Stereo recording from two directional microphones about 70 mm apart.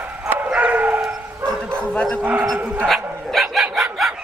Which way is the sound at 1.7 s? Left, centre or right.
Centre.